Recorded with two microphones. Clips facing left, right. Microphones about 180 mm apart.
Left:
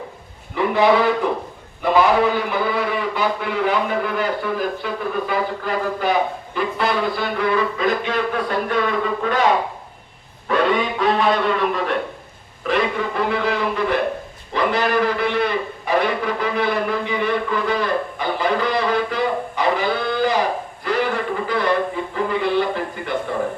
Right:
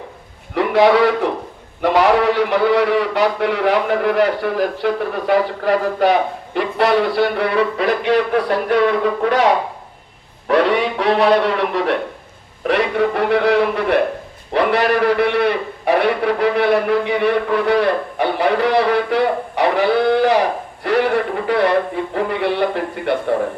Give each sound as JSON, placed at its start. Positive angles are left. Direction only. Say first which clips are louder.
{"t": 0.5, "sound": "a man's voice", "louder": "right 3 dB", "side_deg": -75}
{"t": 10.5, "sound": "a man's voice", "louder": "right 3 dB", "side_deg": -75}
{"t": 20.8, "sound": "music", "louder": "right 5 dB", "side_deg": -70}